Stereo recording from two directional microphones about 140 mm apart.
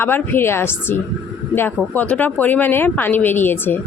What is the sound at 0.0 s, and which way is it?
Speech, 15° left (ahead or behind).